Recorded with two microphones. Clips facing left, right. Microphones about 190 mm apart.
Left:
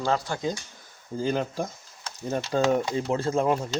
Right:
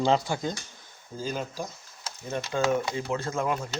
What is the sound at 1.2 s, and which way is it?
Speech, 65° left (ahead or behind).